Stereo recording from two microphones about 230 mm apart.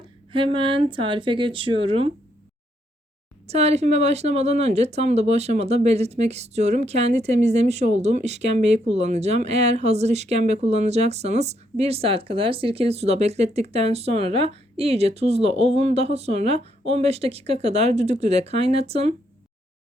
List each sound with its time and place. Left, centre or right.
0.3 s speech: right
3.4 s speech: right